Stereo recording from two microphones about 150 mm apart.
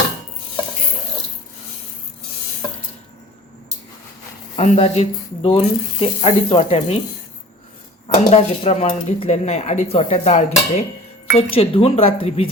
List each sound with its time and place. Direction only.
4.5 s speech: 45° left (ahead or behind)
8.0 s speech: 45° left (ahead or behind)
11.3 s speech: 40° left (ahead or behind)